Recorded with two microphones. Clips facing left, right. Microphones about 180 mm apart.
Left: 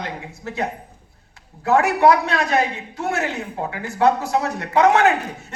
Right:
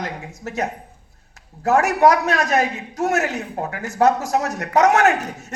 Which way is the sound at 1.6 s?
40° right (ahead or behind).